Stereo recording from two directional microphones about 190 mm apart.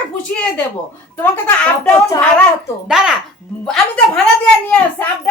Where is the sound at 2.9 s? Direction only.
5° right (ahead or behind).